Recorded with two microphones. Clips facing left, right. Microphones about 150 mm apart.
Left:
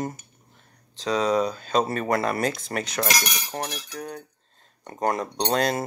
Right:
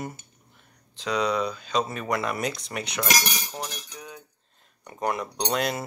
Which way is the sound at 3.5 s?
75° left (ahead or behind).